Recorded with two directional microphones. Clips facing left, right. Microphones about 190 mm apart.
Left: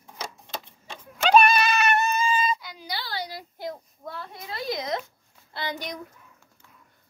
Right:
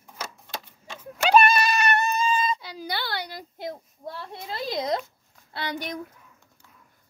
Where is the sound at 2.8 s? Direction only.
65° right (ahead or behind).